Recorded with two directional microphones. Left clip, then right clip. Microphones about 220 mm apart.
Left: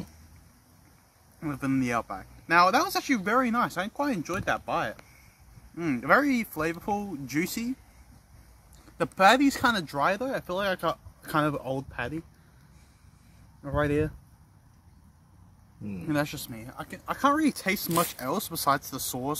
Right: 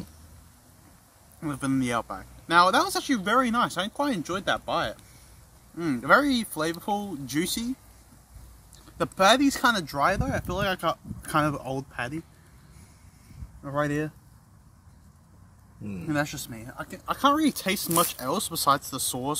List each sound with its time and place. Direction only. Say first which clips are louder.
1.4 s speech: right 1 dB; 5° left (ahead or behind)
8.9 s speech: even; 15° left (ahead or behind)
13.7 s speech: left 1 dB; 20° left (ahead or behind)
15.8 s speech: right 1 dB; centre (ahead or behind)
16.1 s speech: right 1 dB; 20° left (ahead or behind)